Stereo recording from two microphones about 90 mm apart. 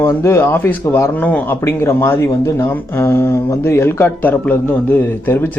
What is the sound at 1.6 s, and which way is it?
Speech, 30° left (ahead or behind).